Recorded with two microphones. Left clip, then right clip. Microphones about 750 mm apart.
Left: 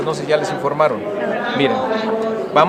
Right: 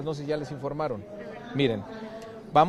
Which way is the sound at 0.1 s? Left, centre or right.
Right.